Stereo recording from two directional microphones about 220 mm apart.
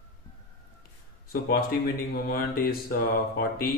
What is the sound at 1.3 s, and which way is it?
A man's voice, 45° left (ahead or behind).